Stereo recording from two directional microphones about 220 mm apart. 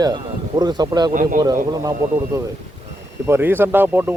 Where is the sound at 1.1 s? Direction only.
35° right (ahead or behind).